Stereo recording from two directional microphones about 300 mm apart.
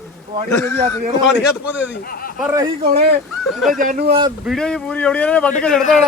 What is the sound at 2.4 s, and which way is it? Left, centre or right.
Speech, centre.